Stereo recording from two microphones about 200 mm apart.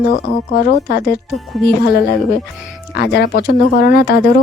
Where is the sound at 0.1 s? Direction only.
45° left (ahead or behind).